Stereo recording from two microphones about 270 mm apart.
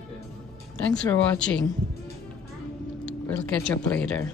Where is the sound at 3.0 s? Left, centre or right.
Centre.